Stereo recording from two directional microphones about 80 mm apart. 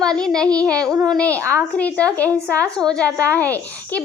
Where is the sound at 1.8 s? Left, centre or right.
Centre.